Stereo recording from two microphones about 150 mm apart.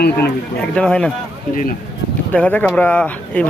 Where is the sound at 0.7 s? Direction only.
5° left (ahead or behind).